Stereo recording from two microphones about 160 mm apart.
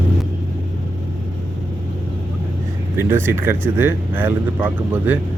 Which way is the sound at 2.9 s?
15° right (ahead or behind).